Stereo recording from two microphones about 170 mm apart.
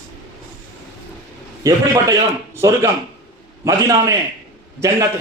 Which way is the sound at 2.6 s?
15° right (ahead or behind).